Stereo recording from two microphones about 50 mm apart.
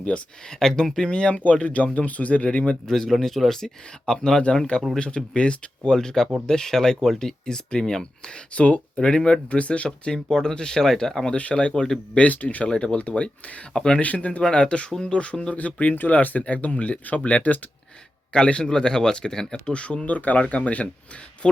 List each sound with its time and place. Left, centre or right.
0.6 s speech: centre
1.6 s speech: left
2.8 s speech: centre
11.3 s speech: left
11.7 s speech: centre
12.1 s speech: left
13.7 s speech: centre
14.0 s speech: left
18.3 s speech: centre
21.4 s speech: centre